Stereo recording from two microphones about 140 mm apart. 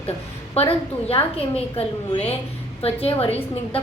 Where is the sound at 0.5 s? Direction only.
40° left (ahead or behind).